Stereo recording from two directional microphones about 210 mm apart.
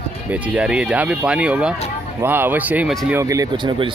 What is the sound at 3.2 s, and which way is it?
Speech, 15° right (ahead or behind).